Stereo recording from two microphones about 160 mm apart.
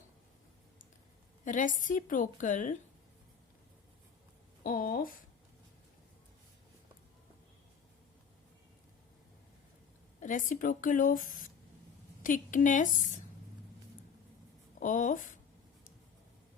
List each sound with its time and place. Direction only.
1.5 s a woman's voice: 55° left (ahead or behind)
4.6 s speech: 60° left (ahead or behind)
10.2 s a woman's voice: 55° left (ahead or behind)
14.8 s a woman's voice: 55° left (ahead or behind)